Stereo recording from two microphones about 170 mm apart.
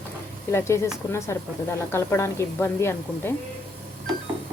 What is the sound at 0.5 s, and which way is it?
A woman's voice, 15° left (ahead or behind).